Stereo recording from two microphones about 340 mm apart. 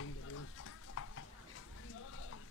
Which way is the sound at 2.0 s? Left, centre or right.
Left.